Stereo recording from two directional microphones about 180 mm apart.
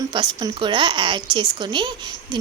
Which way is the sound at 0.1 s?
25° right (ahead or behind).